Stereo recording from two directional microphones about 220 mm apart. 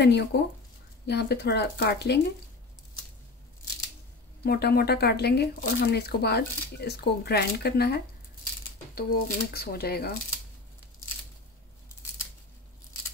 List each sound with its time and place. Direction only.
0.0 s speech: 50° left (ahead or behind)
4.4 s speech: 45° left (ahead or behind)